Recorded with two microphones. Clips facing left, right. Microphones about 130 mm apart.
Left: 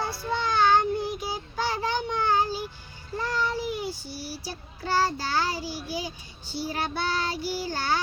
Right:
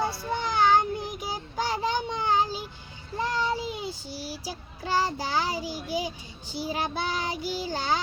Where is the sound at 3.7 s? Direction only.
20° right (ahead or behind).